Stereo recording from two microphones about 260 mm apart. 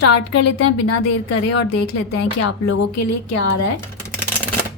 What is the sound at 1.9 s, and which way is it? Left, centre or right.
Speech, left.